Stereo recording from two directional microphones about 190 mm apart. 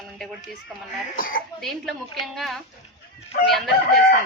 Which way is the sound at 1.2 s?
45° left (ahead or behind).